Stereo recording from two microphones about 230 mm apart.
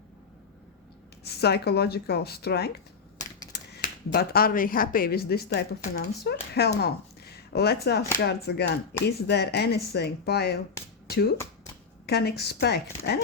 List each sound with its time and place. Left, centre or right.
1.2 s speech: left
12.0 s speech: left